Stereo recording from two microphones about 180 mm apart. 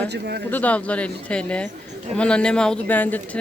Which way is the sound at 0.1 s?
65° right (ahead or behind).